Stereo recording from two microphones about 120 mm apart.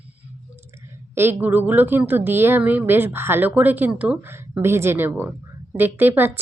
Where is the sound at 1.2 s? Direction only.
15° right (ahead or behind).